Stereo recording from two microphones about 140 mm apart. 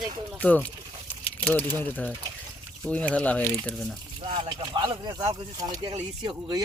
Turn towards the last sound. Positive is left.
turn(degrees=-30)  # may be behind; listen again after turning